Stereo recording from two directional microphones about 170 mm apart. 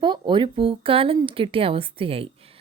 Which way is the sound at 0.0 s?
25° right (ahead or behind).